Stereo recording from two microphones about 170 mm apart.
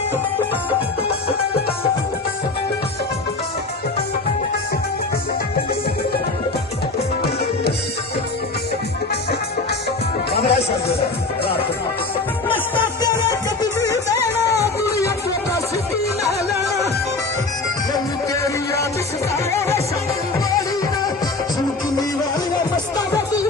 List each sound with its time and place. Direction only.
10.3 s music: 70° left (ahead or behind)
13.6 s music: 20° left (ahead or behind)
18.4 s music: 15° left (ahead or behind)
23.1 s music: 20° left (ahead or behind)